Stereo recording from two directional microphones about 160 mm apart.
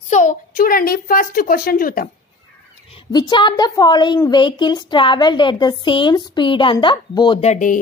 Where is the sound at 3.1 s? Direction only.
30° left (ahead or behind).